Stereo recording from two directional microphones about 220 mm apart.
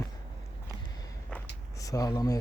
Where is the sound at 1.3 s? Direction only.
15° left (ahead or behind).